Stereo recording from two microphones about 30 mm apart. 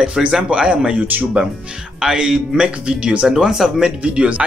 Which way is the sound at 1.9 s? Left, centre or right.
Right.